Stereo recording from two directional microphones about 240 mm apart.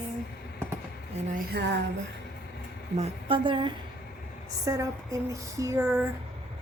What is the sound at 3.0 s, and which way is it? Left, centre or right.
A woman's voice, right.